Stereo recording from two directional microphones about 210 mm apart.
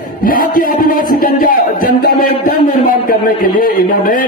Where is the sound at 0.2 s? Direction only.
45° left (ahead or behind).